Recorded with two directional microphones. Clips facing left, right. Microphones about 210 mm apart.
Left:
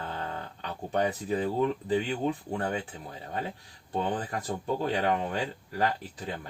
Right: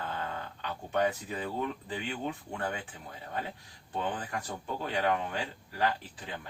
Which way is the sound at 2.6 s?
35° left (ahead or behind).